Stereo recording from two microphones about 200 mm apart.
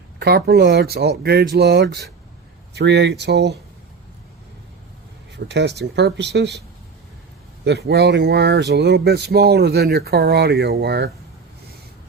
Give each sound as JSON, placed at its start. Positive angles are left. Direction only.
{"t": 0.2, "sound": "speech", "side_deg": -50}
{"t": 5.5, "sound": "speech", "side_deg": -55}
{"t": 7.6, "sound": "speech", "side_deg": -55}